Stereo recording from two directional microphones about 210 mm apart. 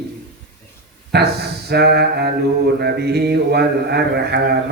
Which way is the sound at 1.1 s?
50° right (ahead or behind).